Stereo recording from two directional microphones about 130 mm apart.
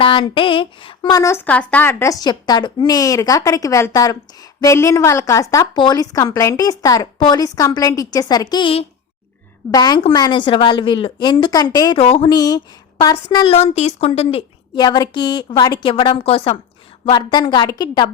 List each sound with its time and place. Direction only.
0.0 s a sound: 40° left (ahead or behind)
1.1 s speech: 20° left (ahead or behind)
9.7 s a woman's voice: 30° left (ahead or behind)
11.9 s a woman's voice: 45° left (ahead or behind)
12.3 s a woman's voice: 30° left (ahead or behind)
13.5 s a woman's voice: 55° left (ahead or behind)
14.8 s a woman's voice: 30° left (ahead or behind)